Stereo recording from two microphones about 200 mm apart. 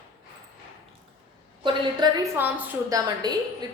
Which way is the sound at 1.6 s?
20° right (ahead or behind).